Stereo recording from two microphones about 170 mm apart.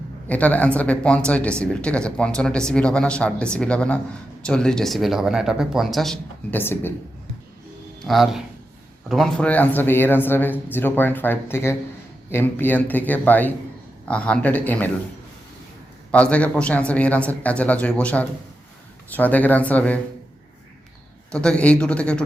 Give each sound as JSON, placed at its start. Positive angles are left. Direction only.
{"t": 0.3, "sound": "speech", "side_deg": 10}
{"t": 6.6, "sound": "speech", "side_deg": 10}
{"t": 8.0, "sound": "speech", "side_deg": 0}
{"t": 16.1, "sound": "speech", "side_deg": 5}
{"t": 21.3, "sound": "speech", "side_deg": 5}